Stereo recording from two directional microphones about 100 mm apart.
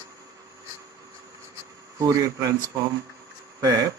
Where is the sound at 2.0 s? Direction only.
35° right (ahead or behind).